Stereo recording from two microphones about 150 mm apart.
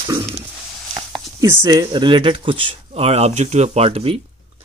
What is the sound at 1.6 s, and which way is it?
Speech, 30° right (ahead or behind).